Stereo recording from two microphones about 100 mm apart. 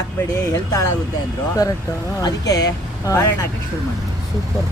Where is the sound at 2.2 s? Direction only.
40° left (ahead or behind).